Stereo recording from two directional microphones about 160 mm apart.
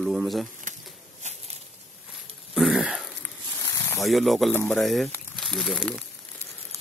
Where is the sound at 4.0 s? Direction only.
Centre (ahead or behind).